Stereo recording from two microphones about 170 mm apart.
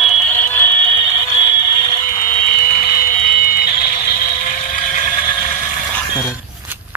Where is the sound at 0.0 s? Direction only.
Centre (ahead or behind).